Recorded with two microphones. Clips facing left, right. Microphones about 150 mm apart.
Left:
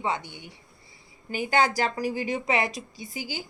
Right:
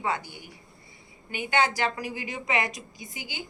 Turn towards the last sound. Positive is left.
turn(degrees=35)  # may be behind; listen again after turning